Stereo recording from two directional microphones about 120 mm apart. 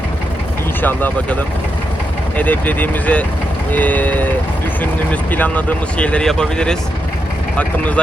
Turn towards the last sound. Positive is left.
turn(degrees=10)  # may be behind; listen again after turning